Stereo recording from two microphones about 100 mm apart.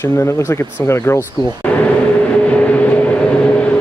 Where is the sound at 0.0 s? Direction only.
30° left (ahead or behind).